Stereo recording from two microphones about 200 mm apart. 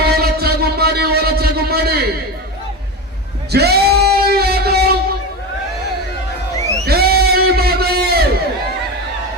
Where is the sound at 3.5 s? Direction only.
55° right (ahead or behind).